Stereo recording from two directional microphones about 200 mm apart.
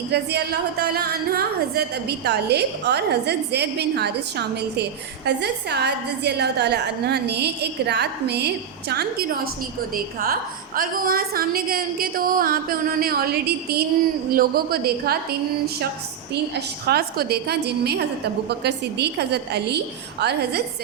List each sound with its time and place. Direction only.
0.1 s a woman's voice: 55° right (ahead or behind)